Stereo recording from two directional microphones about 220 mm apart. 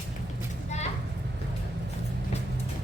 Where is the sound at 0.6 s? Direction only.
30° left (ahead or behind).